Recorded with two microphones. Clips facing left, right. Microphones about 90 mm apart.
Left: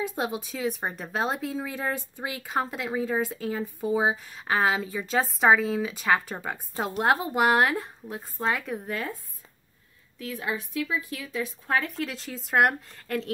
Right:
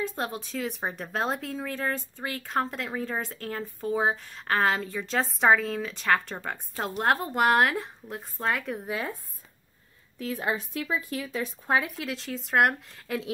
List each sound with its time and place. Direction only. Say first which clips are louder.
0.0 s speech: left 2 dB; 10° left (ahead or behind)
10.1 s speech: right 2 dB; 35° right (ahead or behind)
11.6 s speech: right 1 dB; 15° right (ahead or behind)
12.0 s speech: left 1 dB; centre (ahead or behind)